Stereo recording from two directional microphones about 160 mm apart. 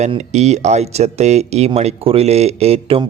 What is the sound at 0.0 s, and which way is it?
Speech, 45° right (ahead or behind).